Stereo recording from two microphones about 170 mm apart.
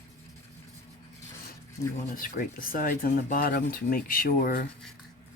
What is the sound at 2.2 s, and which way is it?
Speech, 55° left (ahead or behind).